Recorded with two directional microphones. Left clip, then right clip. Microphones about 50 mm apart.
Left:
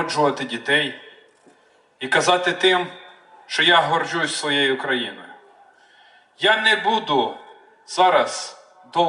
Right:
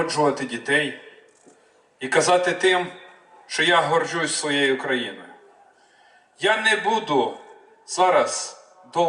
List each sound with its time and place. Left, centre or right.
0.0 s a man's voice: left
6.4 s a man's voice: left